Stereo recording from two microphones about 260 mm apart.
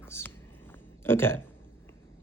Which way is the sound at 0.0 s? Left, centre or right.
Centre.